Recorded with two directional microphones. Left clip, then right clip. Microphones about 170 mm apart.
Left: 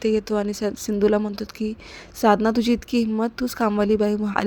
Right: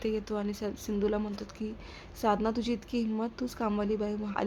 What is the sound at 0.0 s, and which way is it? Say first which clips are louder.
A woman's voice: left 11 dB; 45° left (ahead or behind).